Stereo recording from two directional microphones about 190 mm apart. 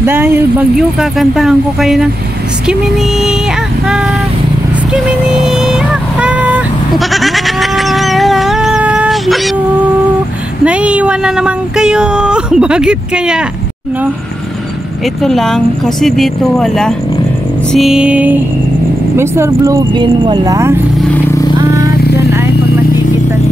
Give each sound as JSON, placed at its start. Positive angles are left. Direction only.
{"t": 0.0, "sound": "speech", "side_deg": -10}
{"t": 4.9, "sound": "vehicle", "side_deg": 0}
{"t": 10.6, "sound": "speech", "side_deg": -5}
{"t": 15.2, "sound": "speech", "side_deg": 0}
{"t": 21.5, "sound": "vehicle", "side_deg": -20}